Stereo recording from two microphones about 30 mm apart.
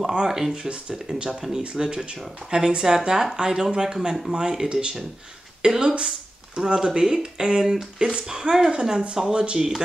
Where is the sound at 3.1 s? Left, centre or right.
Centre.